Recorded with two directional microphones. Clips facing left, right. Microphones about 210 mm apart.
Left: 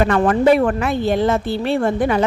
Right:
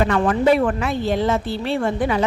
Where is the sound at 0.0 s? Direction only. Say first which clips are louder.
Left 3 dB; 50° left (ahead or behind).